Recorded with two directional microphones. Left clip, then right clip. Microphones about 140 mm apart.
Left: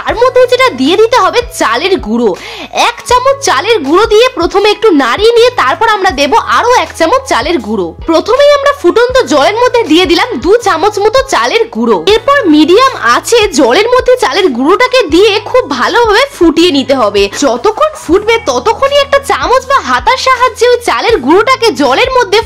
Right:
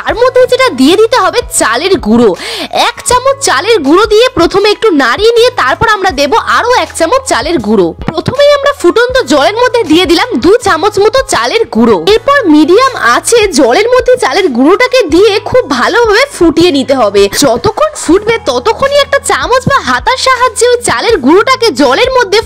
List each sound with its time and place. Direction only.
0.3 s a woman's voice: 35° right (ahead or behind)
17.4 s a woman's voice: 45° right (ahead or behind)